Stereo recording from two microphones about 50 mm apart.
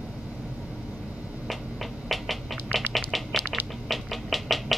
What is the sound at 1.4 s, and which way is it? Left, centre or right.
Finger snapping, centre.